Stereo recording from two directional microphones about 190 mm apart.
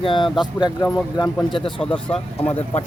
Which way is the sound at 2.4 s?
35° left (ahead or behind).